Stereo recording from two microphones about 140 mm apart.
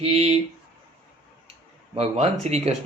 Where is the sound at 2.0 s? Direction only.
50° right (ahead or behind).